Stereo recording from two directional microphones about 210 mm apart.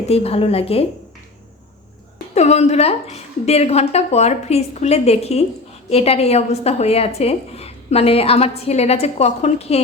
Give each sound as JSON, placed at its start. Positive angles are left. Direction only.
{"t": 0.1, "sound": "a woman's voice", "side_deg": 30}
{"t": 2.3, "sound": "a woman's voice", "side_deg": 30}